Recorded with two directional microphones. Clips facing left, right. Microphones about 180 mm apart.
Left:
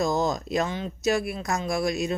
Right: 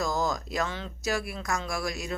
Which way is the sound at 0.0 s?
20° left (ahead or behind).